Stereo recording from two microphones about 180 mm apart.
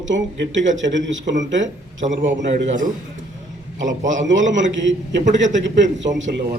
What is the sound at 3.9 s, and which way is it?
A man's voice, 90° right.